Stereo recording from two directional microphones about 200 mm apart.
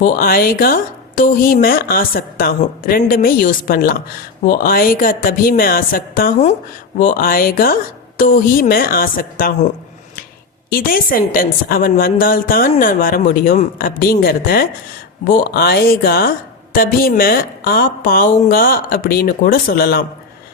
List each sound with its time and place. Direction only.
0.0 s a woman's voice: 45° left (ahead or behind)